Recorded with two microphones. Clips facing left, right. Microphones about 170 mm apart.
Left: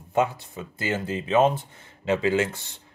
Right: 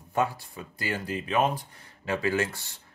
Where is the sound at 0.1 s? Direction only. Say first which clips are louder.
Left 4 dB; 20° left (ahead or behind).